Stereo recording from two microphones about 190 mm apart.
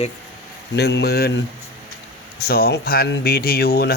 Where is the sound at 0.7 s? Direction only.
60° left (ahead or behind).